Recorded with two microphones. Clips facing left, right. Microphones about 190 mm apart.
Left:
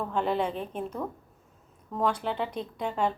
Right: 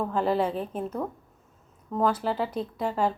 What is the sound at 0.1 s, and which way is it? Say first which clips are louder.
Speech: right 1 dB; 5° right (ahead or behind).